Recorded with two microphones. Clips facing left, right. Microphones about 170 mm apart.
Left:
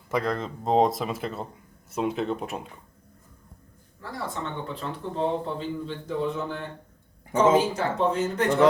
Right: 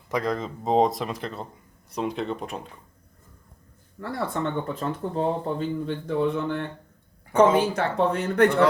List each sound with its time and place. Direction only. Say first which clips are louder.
0.1 s speech: even; centre (ahead or behind)
4.4 s speech: right 8 dB; 55° right (ahead or behind)
4.7 s speech: right 4 dB; 45° right (ahead or behind); by 8.4 s 60° right (ahead or behind)